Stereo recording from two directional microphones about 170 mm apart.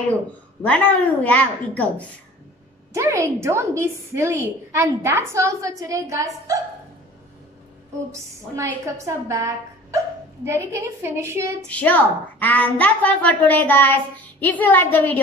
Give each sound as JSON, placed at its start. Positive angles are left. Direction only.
{"t": 0.6, "sound": "a woman's voice", "side_deg": 10}
{"t": 2.9, "sound": "a woman's voice", "side_deg": -20}
{"t": 8.1, "sound": "a woman's voice", "side_deg": -20}
{"t": 11.6, "sound": "a woman's voice", "side_deg": 10}